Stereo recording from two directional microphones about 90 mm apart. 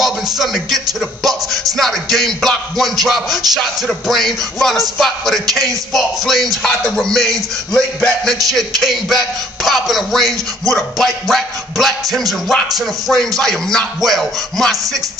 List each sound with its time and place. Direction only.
0.0 s music: centre (ahead or behind)
1.5 s music: 40° right (ahead or behind)
1.8 s music: centre (ahead or behind)
7.7 s a sound: 10° left (ahead or behind)
8.5 s music: centre (ahead or behind)